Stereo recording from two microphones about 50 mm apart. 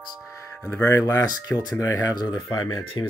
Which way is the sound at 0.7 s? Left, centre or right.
Left.